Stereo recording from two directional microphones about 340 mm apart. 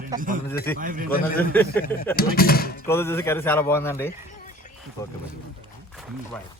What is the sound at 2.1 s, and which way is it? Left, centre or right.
Speech, left.